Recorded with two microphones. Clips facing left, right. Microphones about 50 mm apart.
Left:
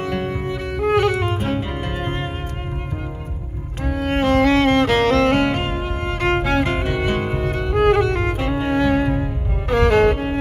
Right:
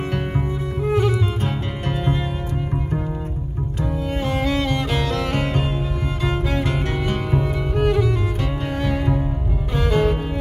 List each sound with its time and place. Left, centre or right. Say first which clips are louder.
0.8 s music: left 3 dB; left
4.1 s music: left 9 dB; left
7.2 s music: left 1 dB; left
9.7 s music: left 5 dB; left